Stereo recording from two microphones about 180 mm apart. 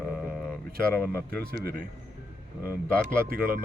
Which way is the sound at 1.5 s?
60° right (ahead or behind).